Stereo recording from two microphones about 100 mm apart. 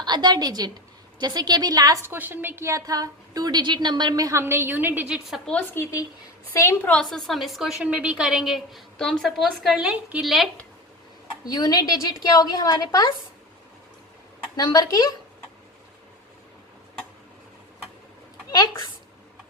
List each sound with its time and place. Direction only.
0.0 s a woman's voice: 45° right (ahead or behind)
2.0 s a woman's voice: 20° right (ahead or behind)
5.8 s speech: 25° left (ahead or behind)
6.8 s a woman's voice: 10° left (ahead or behind)
7.9 s a woman's voice: 15° right (ahead or behind)
11.4 s a woman's voice: 45° left (ahead or behind)
14.5 s a woman's voice: 40° left (ahead or behind)